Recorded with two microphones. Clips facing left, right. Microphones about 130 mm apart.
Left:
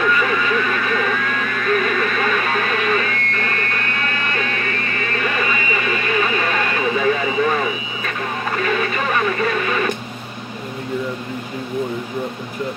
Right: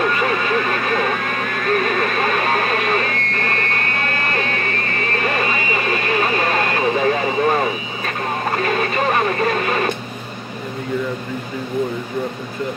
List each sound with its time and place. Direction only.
0.0 s vehicle: 40° right (ahead or behind)